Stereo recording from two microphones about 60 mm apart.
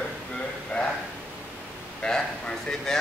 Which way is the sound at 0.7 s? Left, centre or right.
Left.